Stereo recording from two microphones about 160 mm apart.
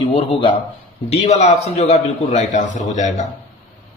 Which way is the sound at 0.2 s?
35° left (ahead or behind).